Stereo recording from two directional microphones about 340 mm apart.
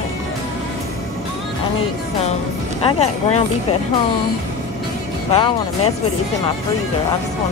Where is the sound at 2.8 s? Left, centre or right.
Centre.